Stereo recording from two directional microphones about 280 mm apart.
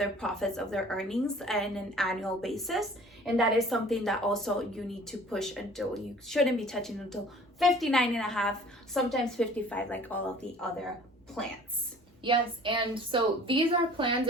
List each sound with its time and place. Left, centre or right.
0.0 s a woman's voice: centre
12.2 s a woman's voice: centre